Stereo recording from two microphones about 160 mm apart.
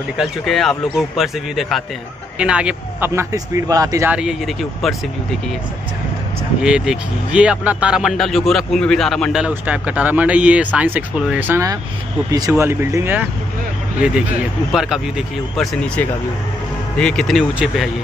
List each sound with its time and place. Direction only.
0.2 s speech: centre (ahead or behind)
3.1 s speech: 20° right (ahead or behind)
4.1 s speech: 5° right (ahead or behind)
6.6 s speech: 5° right (ahead or behind)
14.7 s speech: 5° right (ahead or behind)